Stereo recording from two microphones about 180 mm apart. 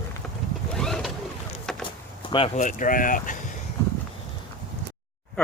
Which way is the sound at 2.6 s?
45° left (ahead or behind).